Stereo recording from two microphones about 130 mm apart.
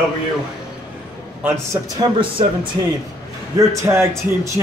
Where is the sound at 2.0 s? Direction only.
40° right (ahead or behind).